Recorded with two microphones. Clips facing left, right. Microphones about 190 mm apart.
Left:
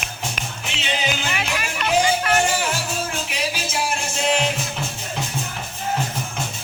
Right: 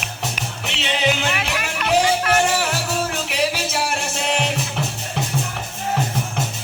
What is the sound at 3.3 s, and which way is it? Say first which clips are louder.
Music: right 5 dB; 65° right (ahead or behind).